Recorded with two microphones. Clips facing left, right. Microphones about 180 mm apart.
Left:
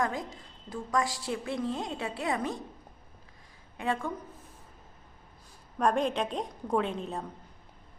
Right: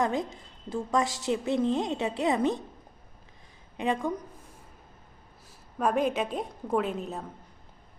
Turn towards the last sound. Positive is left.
turn(degrees=-5)  # may be behind; listen again after turning